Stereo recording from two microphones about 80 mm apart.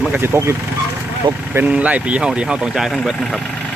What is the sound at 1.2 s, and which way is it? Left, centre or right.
Speech, right.